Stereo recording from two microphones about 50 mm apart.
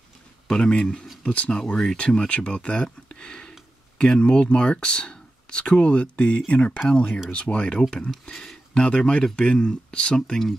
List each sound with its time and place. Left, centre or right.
0.5 s speech: centre
1.7 s speech: centre
8.8 s speech: left